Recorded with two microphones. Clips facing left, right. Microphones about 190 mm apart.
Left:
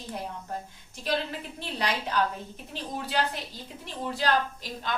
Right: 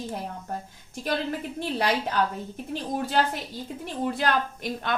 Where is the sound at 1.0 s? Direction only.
50° right (ahead or behind).